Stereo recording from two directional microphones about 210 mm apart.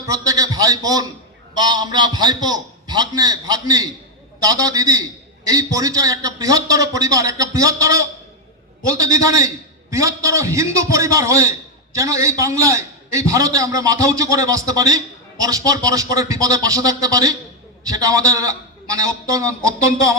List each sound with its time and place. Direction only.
0.0 s a man's voice: 15° right (ahead or behind)